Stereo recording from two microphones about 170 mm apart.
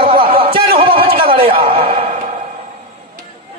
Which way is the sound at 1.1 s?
60° right (ahead or behind).